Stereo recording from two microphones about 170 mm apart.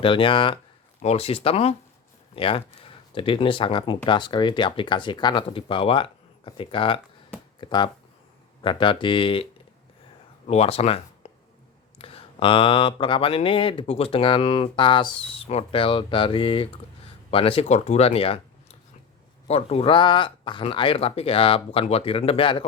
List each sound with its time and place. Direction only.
0.0 s speech: 30° left (ahead or behind)